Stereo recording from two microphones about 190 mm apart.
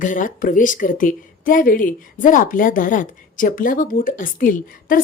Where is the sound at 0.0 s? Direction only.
45° left (ahead or behind).